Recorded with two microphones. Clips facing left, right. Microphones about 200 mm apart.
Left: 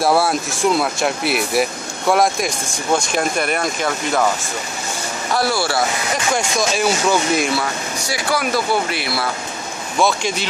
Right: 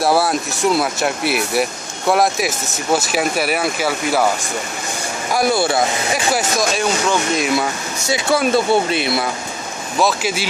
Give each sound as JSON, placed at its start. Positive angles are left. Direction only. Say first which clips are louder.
{"t": 0.0, "sound": "speech", "louder": "even", "side_deg": 0}
{"t": 5.3, "sound": "speech", "louder": "right 3 dB", "side_deg": -20}
{"t": 6.3, "sound": "speech", "louder": "right 1 dB", "side_deg": 0}
{"t": 8.1, "sound": "speech", "louder": "right 5 dB", "side_deg": -25}
{"t": 9.9, "sound": "speech", "louder": "even", "side_deg": -5}